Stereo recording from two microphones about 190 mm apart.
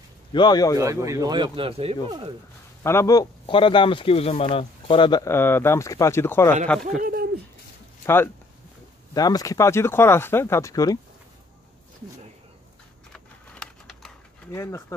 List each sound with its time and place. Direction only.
0.3 s speech: 20° left (ahead or behind)
0.7 s a man's voice: 15° right (ahead or behind)
2.8 s speech: 15° left (ahead or behind)
7.0 s owl: 50° right (ahead or behind)
8.0 s speech: 10° left (ahead or behind)
13.1 s a sound: 5° left (ahead or behind)
14.5 s speech: 15° left (ahead or behind)